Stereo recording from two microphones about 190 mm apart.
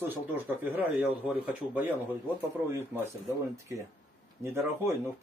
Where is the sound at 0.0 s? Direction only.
10° right (ahead or behind).